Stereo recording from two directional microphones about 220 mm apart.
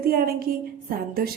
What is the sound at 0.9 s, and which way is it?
Speech, 45° right (ahead or behind).